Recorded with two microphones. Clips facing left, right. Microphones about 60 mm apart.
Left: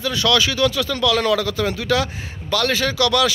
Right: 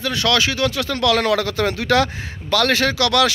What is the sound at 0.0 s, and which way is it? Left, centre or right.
Speech, right.